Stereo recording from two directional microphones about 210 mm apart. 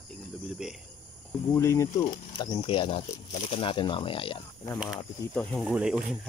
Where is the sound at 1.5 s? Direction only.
15° left (ahead or behind).